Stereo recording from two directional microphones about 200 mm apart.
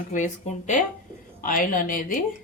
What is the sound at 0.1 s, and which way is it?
Speech, 40° left (ahead or behind).